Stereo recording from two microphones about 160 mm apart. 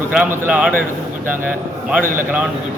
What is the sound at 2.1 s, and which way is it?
Speech, 10° right (ahead or behind).